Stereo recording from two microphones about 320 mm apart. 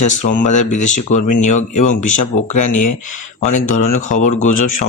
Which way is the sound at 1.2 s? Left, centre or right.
Left.